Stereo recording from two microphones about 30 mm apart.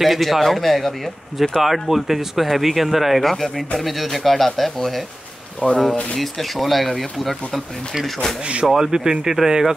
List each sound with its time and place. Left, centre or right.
0.0 s speech: centre
1.6 s speech: centre
3.3 s speech: centre
5.6 s speech: left
6.1 s speech: centre
8.6 s speech: centre